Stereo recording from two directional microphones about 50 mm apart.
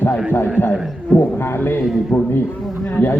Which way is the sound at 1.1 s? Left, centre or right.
Left.